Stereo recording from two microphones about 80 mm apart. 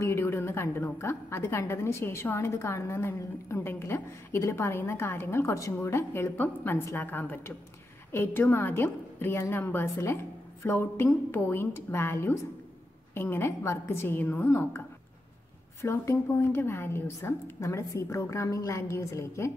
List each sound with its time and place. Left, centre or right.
0.0 s a woman's voice: left
15.8 s a woman's voice: left